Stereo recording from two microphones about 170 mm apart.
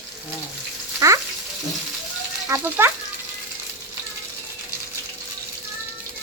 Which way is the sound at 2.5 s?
15° right (ahead or behind).